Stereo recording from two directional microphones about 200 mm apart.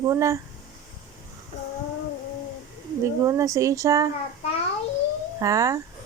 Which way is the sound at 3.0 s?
15° right (ahead or behind).